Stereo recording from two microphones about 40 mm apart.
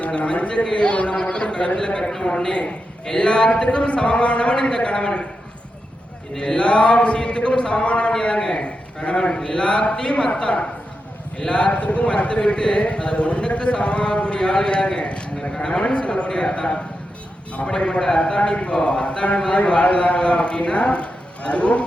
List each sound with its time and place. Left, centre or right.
0.2 s a man's voice: left
2.0 s a man's voice: centre
6.3 s a man's voice: centre